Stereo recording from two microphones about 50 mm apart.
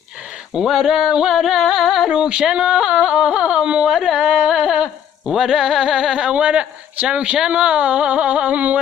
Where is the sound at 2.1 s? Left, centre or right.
Right.